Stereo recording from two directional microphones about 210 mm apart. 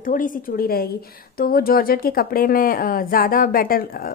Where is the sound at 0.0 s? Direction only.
40° left (ahead or behind).